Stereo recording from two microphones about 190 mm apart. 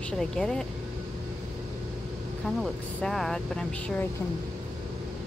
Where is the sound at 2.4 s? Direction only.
Centre (ahead or behind).